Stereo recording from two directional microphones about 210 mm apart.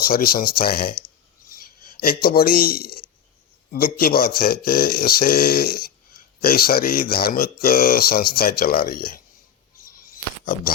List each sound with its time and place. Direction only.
0.0 s speech: 45° left (ahead or behind)
1.5 s a sound: 45° left (ahead or behind)
3.7 s speech: 45° left (ahead or behind)
10.4 s speech: 40° left (ahead or behind)